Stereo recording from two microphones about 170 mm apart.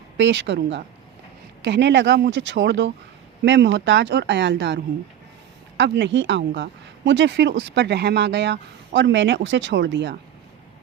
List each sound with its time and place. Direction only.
0.2 s a woman's voice: 90° right